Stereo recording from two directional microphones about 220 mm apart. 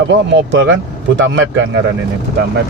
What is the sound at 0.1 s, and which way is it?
Speech, 55° right (ahead or behind).